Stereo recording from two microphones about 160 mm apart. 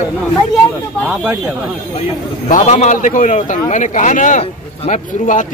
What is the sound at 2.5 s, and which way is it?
A man's voice, 45° left (ahead or behind).